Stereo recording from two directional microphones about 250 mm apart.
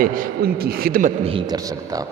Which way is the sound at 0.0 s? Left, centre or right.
Right.